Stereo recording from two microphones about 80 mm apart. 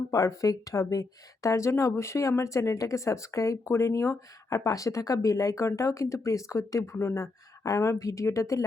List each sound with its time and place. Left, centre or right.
0.1 s speech: left